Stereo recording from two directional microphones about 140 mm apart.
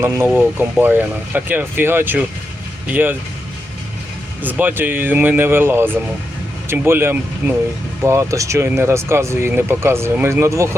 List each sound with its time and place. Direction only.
0.3 s speech: 15° right (ahead or behind)
4.4 s speech: 15° right (ahead or behind)